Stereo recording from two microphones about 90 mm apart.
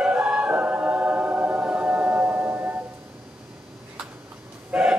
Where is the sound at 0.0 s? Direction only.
15° right (ahead or behind).